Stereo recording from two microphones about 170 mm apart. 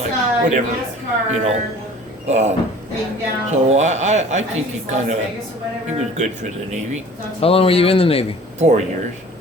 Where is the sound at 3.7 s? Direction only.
45° right (ahead or behind).